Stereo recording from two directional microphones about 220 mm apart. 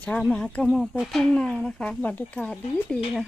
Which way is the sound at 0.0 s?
5° left (ahead or behind).